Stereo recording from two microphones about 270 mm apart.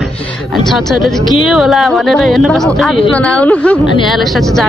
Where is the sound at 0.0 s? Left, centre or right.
Centre.